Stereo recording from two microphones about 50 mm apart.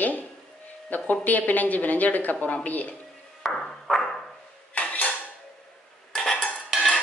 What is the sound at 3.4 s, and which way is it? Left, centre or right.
Ping, centre.